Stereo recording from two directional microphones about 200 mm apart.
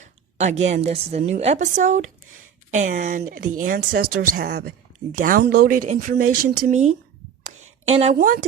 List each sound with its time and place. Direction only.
0.3 s a woman's voice: 35° right (ahead or behind)
3.8 s a woman's voice: 55° right (ahead or behind); by 8.4 s 35° right (ahead or behind)